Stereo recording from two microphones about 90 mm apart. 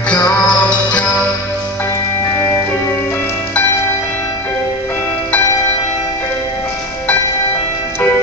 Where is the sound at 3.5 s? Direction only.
15° left (ahead or behind).